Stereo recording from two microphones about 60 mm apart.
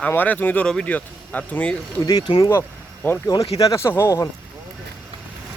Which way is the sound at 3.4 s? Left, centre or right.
Left.